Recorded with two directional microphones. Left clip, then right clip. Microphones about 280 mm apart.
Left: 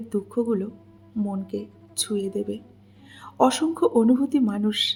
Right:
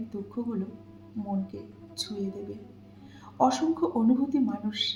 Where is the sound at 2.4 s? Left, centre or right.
Left.